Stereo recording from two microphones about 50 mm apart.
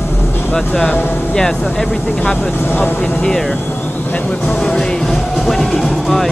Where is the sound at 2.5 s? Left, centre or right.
Left.